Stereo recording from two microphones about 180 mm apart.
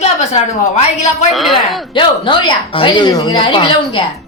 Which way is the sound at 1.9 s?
25° left (ahead or behind).